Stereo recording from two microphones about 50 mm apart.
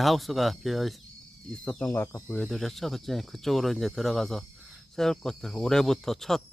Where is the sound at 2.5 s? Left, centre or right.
Centre.